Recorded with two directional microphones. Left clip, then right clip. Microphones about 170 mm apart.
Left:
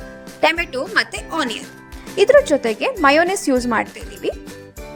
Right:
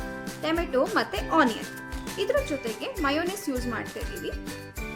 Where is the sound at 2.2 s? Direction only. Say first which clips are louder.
Left 15 dB; 45° left (ahead or behind).